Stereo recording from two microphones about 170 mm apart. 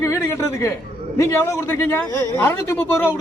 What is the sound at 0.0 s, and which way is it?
Speech, 15° left (ahead or behind).